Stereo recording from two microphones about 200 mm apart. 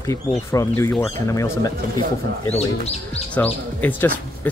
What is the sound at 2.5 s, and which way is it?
Speech, 30° left (ahead or behind).